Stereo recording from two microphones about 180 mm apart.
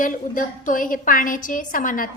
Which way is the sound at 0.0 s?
45° left (ahead or behind).